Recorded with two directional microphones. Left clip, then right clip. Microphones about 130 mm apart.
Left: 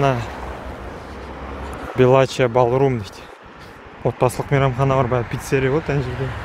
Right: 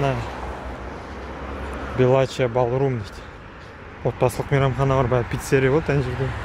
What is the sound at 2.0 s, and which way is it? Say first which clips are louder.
Speech: left 4 dB; 45° left (ahead or behind).